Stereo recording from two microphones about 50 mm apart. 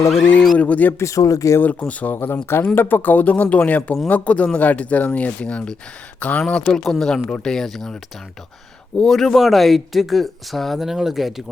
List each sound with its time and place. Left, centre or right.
0.2 s speech: left
0.9 s speech: left
1.9 s speech: left
2.1 s speech: left
6.5 s speech: centre
6.8 s speech: centre
9.0 s speech: centre